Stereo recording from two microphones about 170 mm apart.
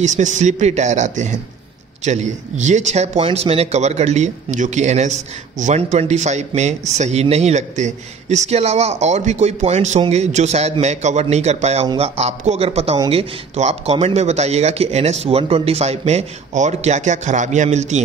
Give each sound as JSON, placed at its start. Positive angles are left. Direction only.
{"t": 0.0, "sound": "speech", "side_deg": -45}